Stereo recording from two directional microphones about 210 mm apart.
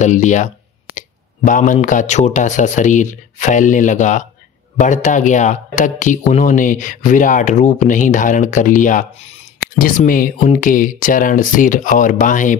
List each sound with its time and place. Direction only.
0.0 s speech: 35° left (ahead or behind)